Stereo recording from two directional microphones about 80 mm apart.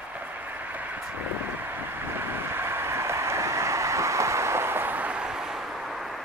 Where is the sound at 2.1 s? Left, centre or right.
Right; by 5.6 s centre.